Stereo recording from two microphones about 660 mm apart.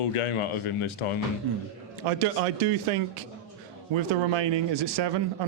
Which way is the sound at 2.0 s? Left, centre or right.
Right.